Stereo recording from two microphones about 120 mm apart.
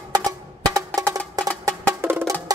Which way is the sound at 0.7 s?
30° right (ahead or behind).